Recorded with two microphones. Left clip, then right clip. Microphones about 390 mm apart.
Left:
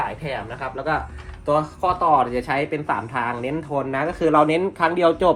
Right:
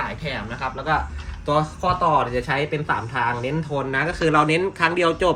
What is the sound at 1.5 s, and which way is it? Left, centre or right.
Speech, left.